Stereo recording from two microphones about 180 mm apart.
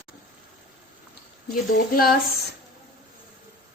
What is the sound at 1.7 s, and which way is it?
Speech, 55° left (ahead or behind).